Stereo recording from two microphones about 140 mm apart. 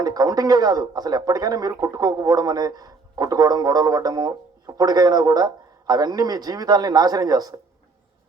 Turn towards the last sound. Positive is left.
turn(degrees=-30)  # may be behind; listen again after turning